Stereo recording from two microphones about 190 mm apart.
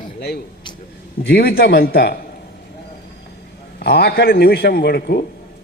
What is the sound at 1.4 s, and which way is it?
Speech, 55° left (ahead or behind).